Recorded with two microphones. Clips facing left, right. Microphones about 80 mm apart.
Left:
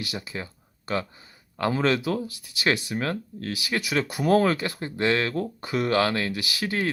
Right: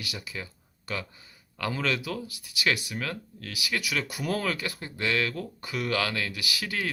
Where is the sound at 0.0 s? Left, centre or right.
Left.